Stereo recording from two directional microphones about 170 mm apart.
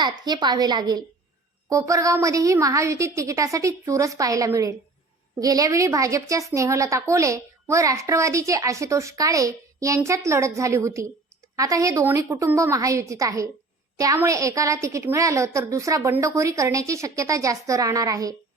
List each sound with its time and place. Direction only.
0.0 s a woman's voice: 25° right (ahead or behind)